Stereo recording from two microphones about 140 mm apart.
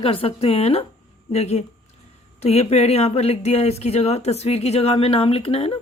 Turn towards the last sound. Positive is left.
turn(degrees=45)  # may be behind; listen again after turning